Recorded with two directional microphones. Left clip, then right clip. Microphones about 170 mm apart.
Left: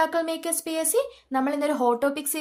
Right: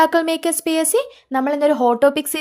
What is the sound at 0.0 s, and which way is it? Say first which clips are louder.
A woman's voice: right 9 dB; 50° right (ahead or behind).